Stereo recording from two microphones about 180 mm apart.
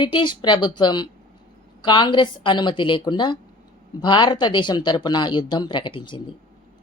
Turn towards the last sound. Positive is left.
turn(degrees=25)  # may be behind; listen again after turning